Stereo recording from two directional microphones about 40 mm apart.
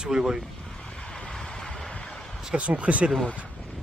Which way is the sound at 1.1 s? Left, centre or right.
Left.